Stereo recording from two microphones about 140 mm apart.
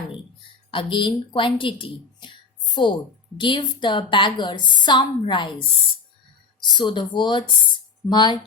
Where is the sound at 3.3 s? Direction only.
35° left (ahead or behind).